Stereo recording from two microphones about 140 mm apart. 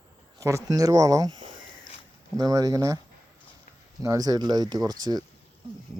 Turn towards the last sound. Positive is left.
turn(degrees=-30)  # may be behind; listen again after turning